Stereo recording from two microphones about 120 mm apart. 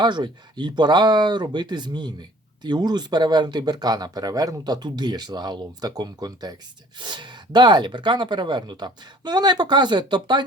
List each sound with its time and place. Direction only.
0.0 s speech: 40° right (ahead or behind)